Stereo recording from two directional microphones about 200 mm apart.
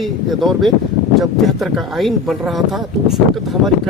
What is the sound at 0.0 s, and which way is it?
Speech, centre (ahead or behind).